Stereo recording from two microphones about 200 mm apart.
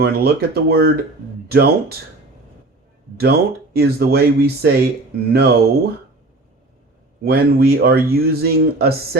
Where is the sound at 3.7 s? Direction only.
50° right (ahead or behind).